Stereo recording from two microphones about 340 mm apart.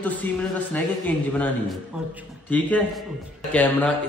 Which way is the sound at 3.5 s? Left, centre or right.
Centre.